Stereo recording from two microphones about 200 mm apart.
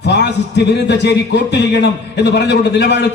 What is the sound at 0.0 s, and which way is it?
A man's voice, 60° left (ahead or behind).